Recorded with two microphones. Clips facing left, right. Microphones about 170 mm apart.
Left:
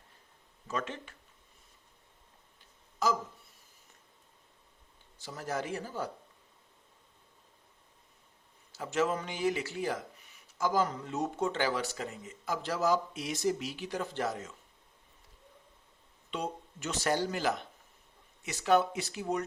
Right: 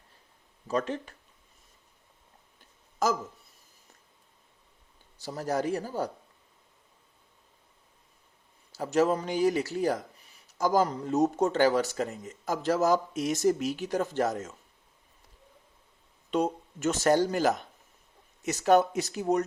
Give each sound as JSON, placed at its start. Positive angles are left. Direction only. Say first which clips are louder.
{"t": 0.7, "sound": "speech", "louder": "right 7 dB", "side_deg": -35}
{"t": 3.0, "sound": "a sound", "louder": "right 3 dB", "side_deg": -45}
{"t": 5.1, "sound": "speech", "louder": "right 6 dB", "side_deg": -35}
{"t": 8.7, "sound": "speech", "louder": "right 6 dB", "side_deg": -40}
{"t": 16.3, "sound": "speech", "louder": "right 9 dB", "side_deg": -45}